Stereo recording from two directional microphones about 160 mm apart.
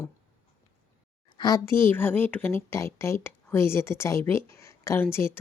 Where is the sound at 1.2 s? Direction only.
25° left (ahead or behind).